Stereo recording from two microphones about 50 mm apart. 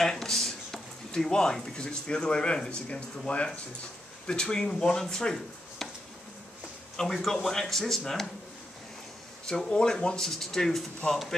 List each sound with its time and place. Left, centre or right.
0.0 s speech: centre
7.0 s speech: centre
9.7 s speech: centre